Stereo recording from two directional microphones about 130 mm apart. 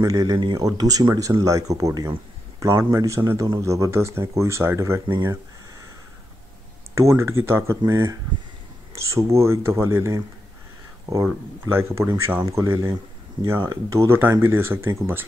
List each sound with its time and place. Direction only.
0.0 s speech: 25° right (ahead or behind)
5.0 s speech: 30° right (ahead or behind)
7.0 s speech: 20° right (ahead or behind)